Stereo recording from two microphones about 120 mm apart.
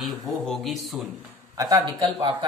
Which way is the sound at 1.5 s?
30° right (ahead or behind).